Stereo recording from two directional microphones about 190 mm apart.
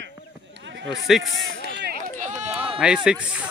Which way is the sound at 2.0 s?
40° right (ahead or behind).